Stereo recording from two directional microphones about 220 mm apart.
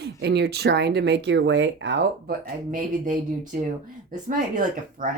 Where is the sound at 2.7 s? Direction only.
40° right (ahead or behind).